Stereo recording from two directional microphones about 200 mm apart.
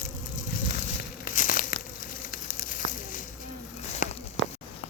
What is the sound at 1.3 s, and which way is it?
Crumpling, 45° left (ahead or behind).